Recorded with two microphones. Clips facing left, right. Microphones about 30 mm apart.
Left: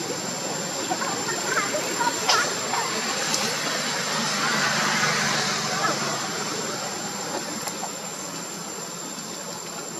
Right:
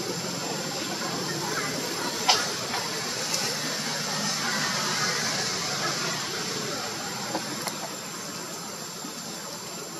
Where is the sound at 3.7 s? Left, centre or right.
Left.